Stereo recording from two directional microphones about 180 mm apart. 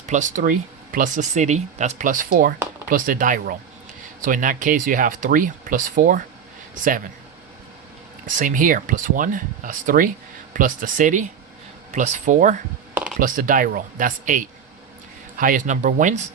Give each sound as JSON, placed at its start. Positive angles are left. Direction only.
{"t": 0.0, "sound": "speech", "side_deg": -40}
{"t": 8.4, "sound": "speech", "side_deg": -45}